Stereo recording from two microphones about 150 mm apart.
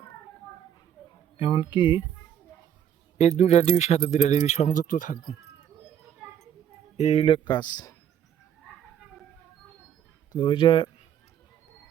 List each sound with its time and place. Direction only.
1.4 s speech: 35° left (ahead or behind)
3.2 s speech: 45° left (ahead or behind); by 5.3 s 65° left (ahead or behind)
6.9 s speech: 45° left (ahead or behind); by 7.9 s 25° left (ahead or behind)
10.3 s speech: 35° left (ahead or behind)